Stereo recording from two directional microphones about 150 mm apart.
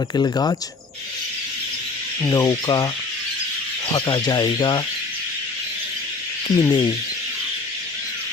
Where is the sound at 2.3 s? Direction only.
25° left (ahead or behind).